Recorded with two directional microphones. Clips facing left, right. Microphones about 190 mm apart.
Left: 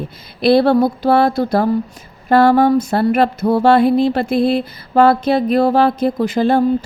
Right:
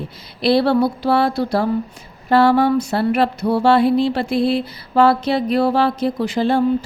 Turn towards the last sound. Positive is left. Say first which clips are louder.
# left 3 dB
turn(degrees=50)  # may be behind; listen again after turning